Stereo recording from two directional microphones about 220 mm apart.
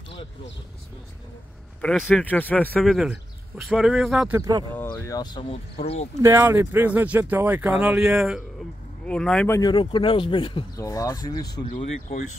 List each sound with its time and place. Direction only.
1.8 s speech: 5° left (ahead or behind)
4.4 s speech: 15° right (ahead or behind)
4.7 s speech: 10° left (ahead or behind); by 6.0 s 30° left (ahead or behind)
6.2 s speech: 10° right (ahead or behind); by 11.4 s 15° left (ahead or behind)
11.4 s speech: 35° left (ahead or behind)